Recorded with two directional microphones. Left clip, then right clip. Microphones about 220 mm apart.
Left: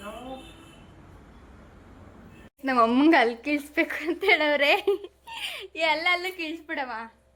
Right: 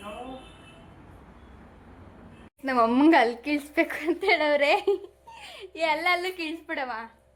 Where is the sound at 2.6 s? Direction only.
5° left (ahead or behind).